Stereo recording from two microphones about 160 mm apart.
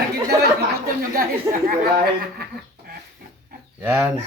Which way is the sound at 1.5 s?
20° right (ahead or behind).